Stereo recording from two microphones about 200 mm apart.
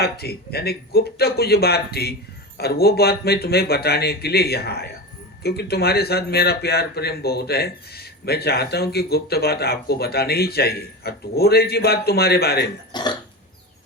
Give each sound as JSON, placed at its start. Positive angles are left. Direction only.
{"t": 0.0, "sound": "speech", "side_deg": 50}
{"t": 12.9, "sound": "cough", "side_deg": 20}